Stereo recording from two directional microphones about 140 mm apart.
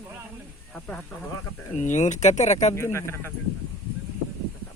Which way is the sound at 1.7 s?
60° left (ahead or behind).